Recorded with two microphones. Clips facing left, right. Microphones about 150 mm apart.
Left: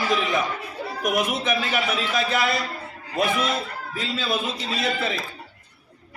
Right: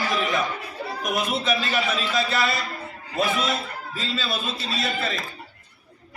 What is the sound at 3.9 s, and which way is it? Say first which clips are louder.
A man's voice: left 3 dB; 15° left (ahead or behind).